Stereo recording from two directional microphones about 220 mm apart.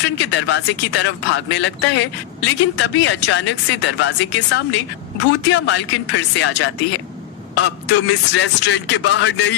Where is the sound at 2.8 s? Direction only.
55° left (ahead or behind).